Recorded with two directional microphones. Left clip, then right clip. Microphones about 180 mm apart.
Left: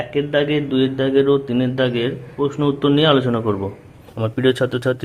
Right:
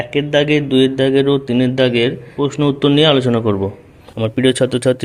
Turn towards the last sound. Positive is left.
turn(degrees=-20)  # may be behind; listen again after turning